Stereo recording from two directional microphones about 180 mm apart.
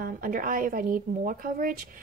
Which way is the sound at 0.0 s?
50° right (ahead or behind).